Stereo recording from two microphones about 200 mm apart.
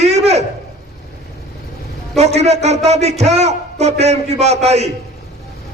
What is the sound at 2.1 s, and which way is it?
A man's voice, 35° right (ahead or behind).